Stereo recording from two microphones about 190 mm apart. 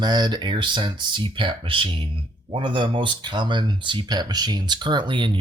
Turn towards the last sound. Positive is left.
turn(degrees=-25)  # may be behind; listen again after turning